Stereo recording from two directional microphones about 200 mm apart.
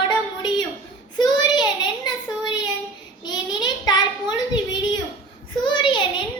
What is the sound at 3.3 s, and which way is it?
Child singing, 20° left (ahead or behind).